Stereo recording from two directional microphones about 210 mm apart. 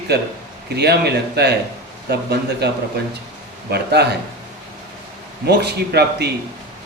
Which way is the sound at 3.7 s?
50° right (ahead or behind).